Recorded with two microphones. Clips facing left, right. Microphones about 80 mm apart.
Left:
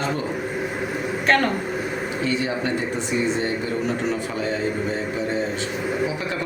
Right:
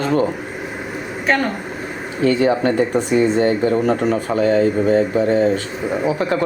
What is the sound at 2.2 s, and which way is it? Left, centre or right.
Speech, right.